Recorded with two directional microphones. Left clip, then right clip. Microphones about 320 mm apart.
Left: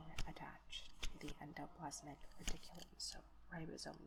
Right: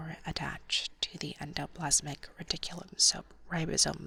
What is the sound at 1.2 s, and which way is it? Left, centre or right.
Speech, right.